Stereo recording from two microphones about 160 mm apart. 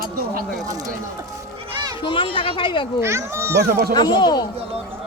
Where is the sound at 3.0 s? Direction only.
15° right (ahead or behind).